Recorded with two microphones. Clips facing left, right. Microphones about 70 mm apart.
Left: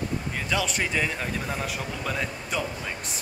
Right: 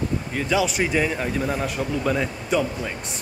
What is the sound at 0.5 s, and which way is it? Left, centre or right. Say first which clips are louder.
Speech: right 6 dB; centre.